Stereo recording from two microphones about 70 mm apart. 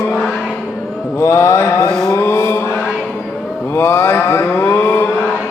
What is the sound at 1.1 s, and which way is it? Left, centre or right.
Mantra, left.